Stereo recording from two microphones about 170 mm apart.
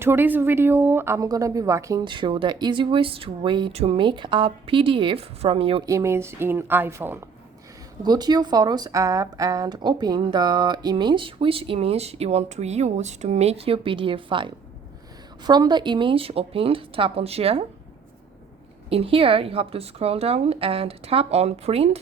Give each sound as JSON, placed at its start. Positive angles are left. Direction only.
{"t": 0.0, "sound": "speech", "side_deg": -15}
{"t": 5.8, "sound": "speech", "side_deg": -15}
{"t": 8.0, "sound": "a woman's voice", "side_deg": -25}
{"t": 18.9, "sound": "a woman's voice", "side_deg": -35}